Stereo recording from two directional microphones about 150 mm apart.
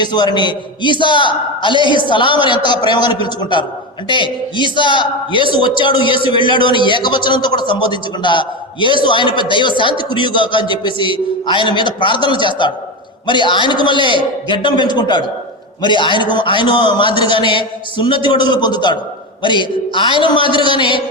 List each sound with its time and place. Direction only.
0.0 s a man's voice: 30° left (ahead or behind)